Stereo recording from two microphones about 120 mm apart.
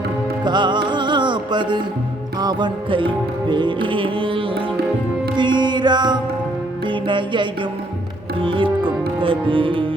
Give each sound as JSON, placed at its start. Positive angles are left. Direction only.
{"t": 0.4, "sound": "music", "side_deg": -40}